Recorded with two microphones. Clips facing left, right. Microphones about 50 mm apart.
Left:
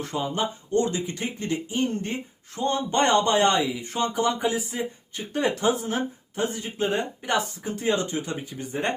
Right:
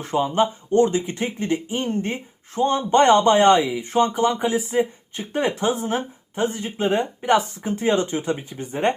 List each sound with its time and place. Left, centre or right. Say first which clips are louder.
0.0 s speech: right 7 dB; right